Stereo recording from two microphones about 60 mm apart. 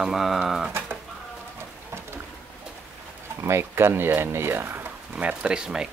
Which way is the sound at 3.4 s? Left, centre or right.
Right.